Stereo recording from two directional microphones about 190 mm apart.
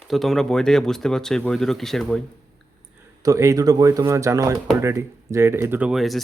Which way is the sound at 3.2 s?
15° right (ahead or behind).